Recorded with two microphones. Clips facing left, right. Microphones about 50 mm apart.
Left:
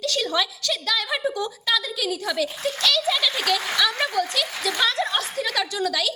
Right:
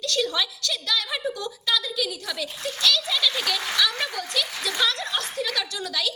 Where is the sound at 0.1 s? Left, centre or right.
Centre.